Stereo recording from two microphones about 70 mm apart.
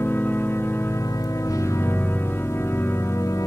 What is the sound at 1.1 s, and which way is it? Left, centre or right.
Organ, left.